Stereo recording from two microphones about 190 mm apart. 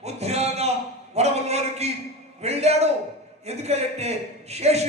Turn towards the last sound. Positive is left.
turn(degrees=-35)  # may be behind; listen again after turning